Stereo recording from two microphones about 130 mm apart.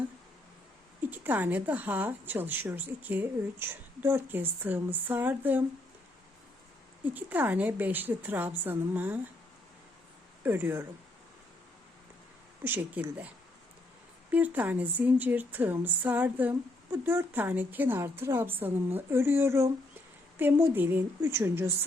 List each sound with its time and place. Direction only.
1.1 s a woman's voice: 15° right (ahead or behind)
7.0 s a woman's voice: 15° right (ahead or behind)
10.4 s a woman's voice: 15° right (ahead or behind)
12.6 s a woman's voice: 15° right (ahead or behind)
14.3 s a woman's voice: 15° right (ahead or behind)